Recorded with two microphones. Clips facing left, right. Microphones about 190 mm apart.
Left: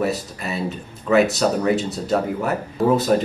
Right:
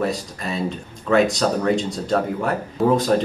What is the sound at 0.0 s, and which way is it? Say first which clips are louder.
Speech: left 1 dB; 5° left (ahead or behind).